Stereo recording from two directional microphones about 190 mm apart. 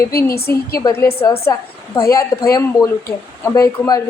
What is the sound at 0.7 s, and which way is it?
A woman's voice, 15° left (ahead or behind).